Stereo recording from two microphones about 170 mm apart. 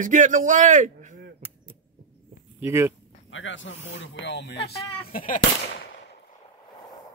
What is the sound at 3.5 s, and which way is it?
Speech, 90° left.